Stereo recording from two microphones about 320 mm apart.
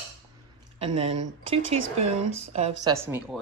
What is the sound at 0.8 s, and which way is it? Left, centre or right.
Speech, centre.